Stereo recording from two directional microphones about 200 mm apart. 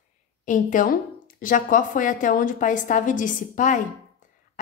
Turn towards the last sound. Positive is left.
turn(degrees=40)  # may be behind; listen again after turning